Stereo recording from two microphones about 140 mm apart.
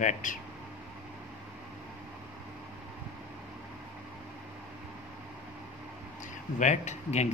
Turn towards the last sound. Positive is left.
turn(degrees=55)  # may be behind; listen again after turning